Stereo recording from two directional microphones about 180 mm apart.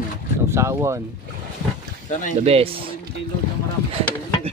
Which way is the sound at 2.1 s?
45° left (ahead or behind).